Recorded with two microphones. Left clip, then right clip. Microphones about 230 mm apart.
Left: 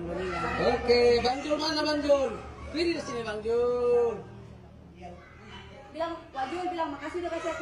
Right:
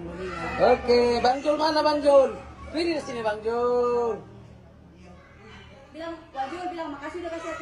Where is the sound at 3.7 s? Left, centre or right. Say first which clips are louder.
Right 5 dB; right.